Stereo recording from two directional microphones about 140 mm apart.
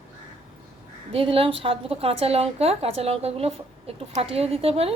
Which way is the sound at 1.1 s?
40° right (ahead or behind).